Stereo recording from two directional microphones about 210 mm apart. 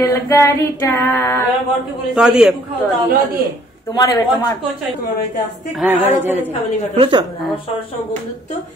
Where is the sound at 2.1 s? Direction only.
5° right (ahead or behind).